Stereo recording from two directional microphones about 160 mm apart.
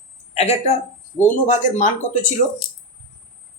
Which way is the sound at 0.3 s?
40° left (ahead or behind).